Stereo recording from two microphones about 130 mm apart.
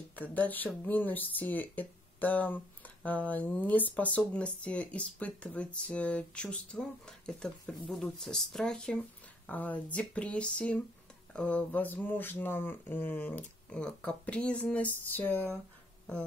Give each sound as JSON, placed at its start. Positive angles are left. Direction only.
{"t": 0.1, "sound": "speech", "side_deg": 15}